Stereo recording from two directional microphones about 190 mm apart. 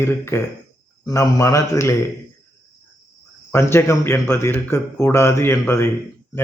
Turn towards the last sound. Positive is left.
turn(degrees=15)  # may be behind; listen again after turning